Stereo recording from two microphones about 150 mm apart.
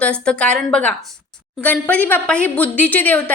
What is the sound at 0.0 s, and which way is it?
A woman's voice, 5° left (ahead or behind).